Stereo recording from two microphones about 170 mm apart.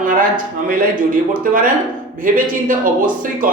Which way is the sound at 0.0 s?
55° right (ahead or behind).